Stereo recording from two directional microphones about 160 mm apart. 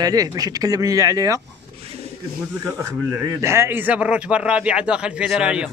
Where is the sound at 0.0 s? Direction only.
25° right (ahead or behind).